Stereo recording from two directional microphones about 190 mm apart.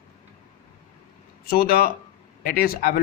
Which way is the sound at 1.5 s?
50° left (ahead or behind).